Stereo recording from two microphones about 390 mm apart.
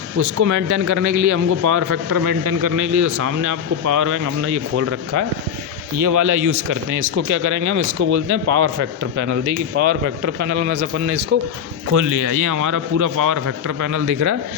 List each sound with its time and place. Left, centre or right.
0.2 s a man's voice: right
6.0 s a man's voice: right